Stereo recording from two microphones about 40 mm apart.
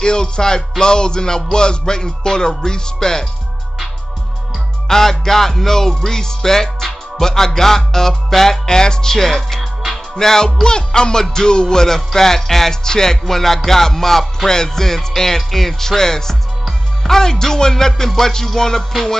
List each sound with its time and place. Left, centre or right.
0.0 s music: centre
4.8 s music: centre